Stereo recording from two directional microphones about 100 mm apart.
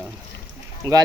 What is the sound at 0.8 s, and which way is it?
Speech, 35° right (ahead or behind).